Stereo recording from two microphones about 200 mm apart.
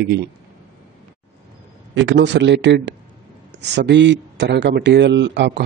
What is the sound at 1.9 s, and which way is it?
Speech, 60° right (ahead or behind).